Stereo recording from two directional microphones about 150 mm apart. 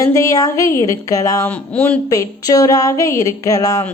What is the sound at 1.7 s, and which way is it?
Speech, 10° left (ahead or behind).